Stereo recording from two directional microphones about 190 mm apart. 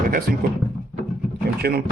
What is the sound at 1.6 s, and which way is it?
Speech, 55° right (ahead or behind).